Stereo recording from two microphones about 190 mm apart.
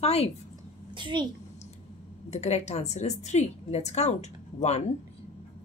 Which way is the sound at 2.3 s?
35° left (ahead or behind).